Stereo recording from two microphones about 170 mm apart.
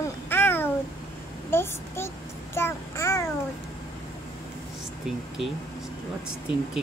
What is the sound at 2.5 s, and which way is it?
Child singing, 15° left (ahead or behind).